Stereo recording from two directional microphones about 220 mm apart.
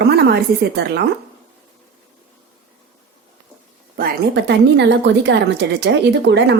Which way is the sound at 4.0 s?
45° right (ahead or behind).